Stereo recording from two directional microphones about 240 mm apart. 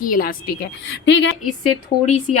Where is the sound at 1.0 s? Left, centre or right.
Left.